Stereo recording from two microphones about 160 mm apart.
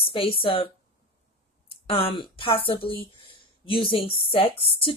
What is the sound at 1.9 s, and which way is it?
Speech, 35° left (ahead or behind).